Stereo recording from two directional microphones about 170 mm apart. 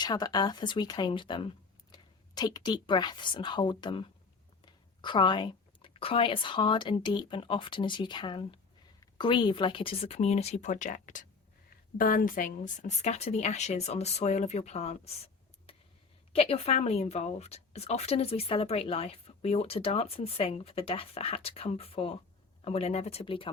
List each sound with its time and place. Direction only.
0.0 s a woman's voice: 25° left (ahead or behind); by 15.1 s 40° left (ahead or behind)
15.7 s a sound: 35° left (ahead or behind)
16.3 s speech: 35° left (ahead or behind)